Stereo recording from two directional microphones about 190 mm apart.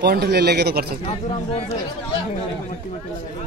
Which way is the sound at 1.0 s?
30° left (ahead or behind).